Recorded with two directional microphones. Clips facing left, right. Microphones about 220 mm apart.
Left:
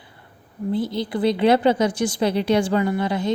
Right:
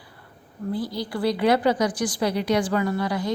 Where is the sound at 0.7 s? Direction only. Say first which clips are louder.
Left 4 dB; 25° left (ahead or behind).